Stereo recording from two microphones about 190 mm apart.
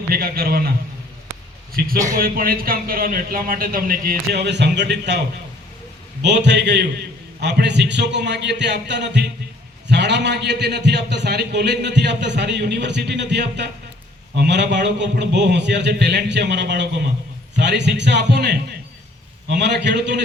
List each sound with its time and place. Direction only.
0.1 s speech: 50° right (ahead or behind)
2.0 s speech: 50° right (ahead or behind)
6.2 s a man's voice: 65° right (ahead or behind)